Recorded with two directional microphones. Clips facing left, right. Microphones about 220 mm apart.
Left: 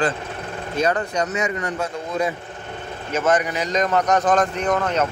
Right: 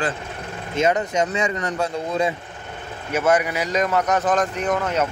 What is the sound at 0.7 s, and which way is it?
Speech, 20° right (ahead or behind).